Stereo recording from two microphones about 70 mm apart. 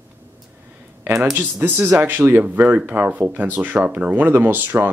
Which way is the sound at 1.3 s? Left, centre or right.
Right.